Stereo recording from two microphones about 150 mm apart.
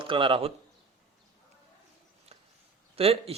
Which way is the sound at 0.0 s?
35° right (ahead or behind).